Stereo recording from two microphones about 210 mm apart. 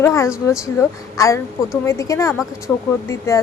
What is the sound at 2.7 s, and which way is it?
Speech, 5° left (ahead or behind).